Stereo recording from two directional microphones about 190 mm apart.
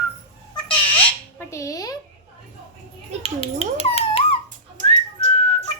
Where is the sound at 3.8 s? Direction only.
30° left (ahead or behind).